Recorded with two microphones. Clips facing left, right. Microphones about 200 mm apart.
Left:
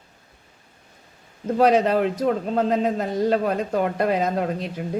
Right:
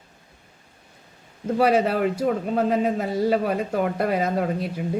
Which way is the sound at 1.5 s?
5° right (ahead or behind).